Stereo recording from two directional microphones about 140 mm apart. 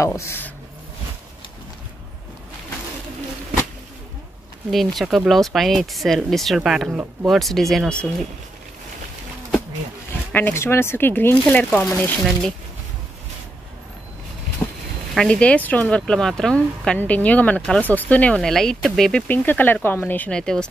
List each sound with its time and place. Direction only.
0.0 s speech: 20° left (ahead or behind)
4.6 s speech: centre (ahead or behind)
10.3 s speech: 15° left (ahead or behind)
15.1 s speech: 5° left (ahead or behind)
19.2 s speech: 15° left (ahead or behind)